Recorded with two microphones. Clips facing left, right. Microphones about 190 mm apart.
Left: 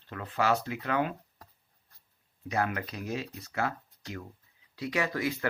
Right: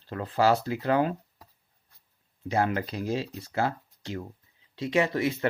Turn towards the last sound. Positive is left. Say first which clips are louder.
# right 5 dB
turn(degrees=-25)  # may be behind; listen again after turning